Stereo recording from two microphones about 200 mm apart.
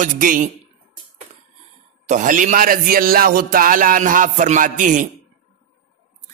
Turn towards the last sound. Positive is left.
turn(degrees=-40)  # may be behind; listen again after turning